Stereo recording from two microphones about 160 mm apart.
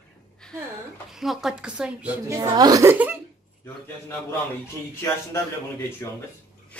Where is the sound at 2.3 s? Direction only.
25° right (ahead or behind).